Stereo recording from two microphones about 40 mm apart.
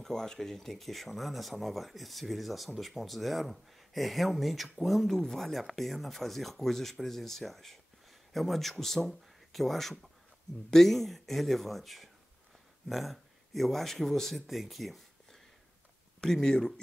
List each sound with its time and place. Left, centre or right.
0.0 s speech: centre
16.2 s speech: centre